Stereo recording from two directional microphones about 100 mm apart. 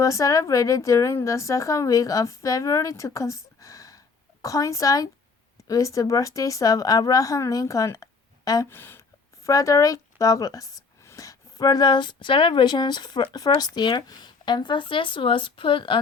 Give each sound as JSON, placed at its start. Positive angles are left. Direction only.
{"t": 0.0, "sound": "a woman's voice", "side_deg": 35}
{"t": 8.7, "sound": "speech", "side_deg": 20}